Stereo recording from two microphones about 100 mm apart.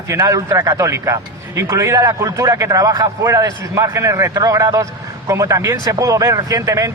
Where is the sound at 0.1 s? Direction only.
30° right (ahead or behind).